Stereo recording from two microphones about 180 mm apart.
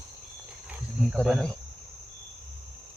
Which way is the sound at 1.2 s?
Centre (ahead or behind).